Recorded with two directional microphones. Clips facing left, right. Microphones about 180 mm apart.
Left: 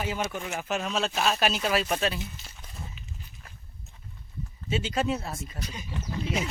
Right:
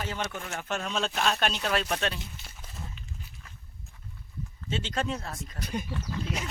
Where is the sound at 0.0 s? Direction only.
10° left (ahead or behind).